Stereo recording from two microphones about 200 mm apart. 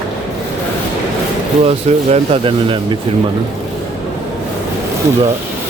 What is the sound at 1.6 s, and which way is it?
Speech, 30° right (ahead or behind).